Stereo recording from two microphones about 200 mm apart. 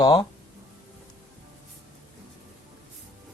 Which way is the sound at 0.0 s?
20° left (ahead or behind).